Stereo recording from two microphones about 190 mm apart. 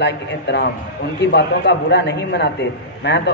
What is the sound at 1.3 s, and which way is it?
A man's voice, 60° left (ahead or behind).